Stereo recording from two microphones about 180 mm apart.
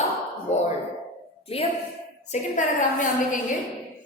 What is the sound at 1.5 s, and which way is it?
Speech, 35° left (ahead or behind).